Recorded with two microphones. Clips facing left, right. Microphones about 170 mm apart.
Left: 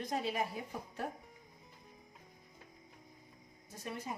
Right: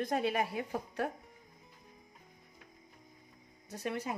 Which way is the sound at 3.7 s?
75° right (ahead or behind).